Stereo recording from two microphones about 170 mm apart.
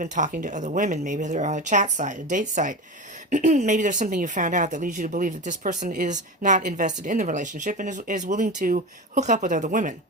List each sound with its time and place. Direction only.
0.0 s a woman's voice: 50° right (ahead or behind)